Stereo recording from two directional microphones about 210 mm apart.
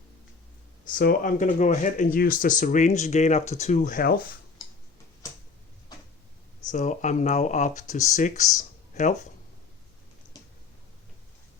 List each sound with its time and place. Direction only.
0.9 s speech: 40° left (ahead or behind)
6.7 s speech: 35° left (ahead or behind)